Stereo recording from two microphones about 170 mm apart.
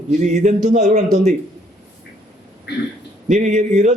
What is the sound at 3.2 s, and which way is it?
Speech, 45° right (ahead or behind).